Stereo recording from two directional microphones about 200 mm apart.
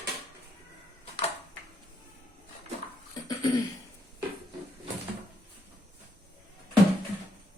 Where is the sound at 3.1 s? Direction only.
20° left (ahead or behind).